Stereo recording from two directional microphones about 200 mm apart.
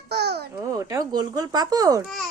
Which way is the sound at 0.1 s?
55° right (ahead or behind).